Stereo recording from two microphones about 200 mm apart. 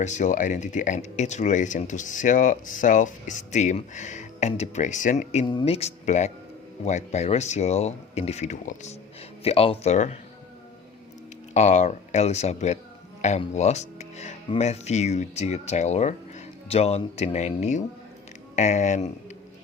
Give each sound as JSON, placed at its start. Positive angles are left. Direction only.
{"t": 0.0, "sound": "speech", "side_deg": 35}
{"t": 11.5, "sound": "speech", "side_deg": 35}